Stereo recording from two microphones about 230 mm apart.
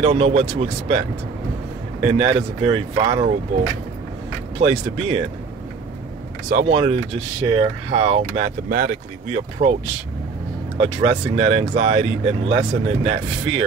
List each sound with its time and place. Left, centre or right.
0.0 s speech: right
4.6 s speech: right
6.5 s speech: right
10.8 s speech: right